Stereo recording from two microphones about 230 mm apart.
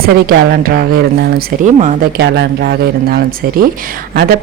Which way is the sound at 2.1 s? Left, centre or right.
Right.